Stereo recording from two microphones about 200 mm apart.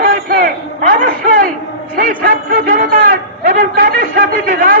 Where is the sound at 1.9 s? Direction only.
45° right (ahead or behind).